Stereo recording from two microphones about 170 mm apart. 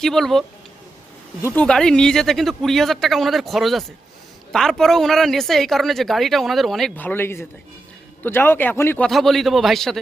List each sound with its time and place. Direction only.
0.0 s speech: centre (ahead or behind)
1.4 s a man's voice: 15° left (ahead or behind)
1.6 s a man's voice: 5° left (ahead or behind)
9.0 s speech: centre (ahead or behind)